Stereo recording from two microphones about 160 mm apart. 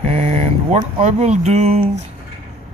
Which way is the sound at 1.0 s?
45° right (ahead or behind).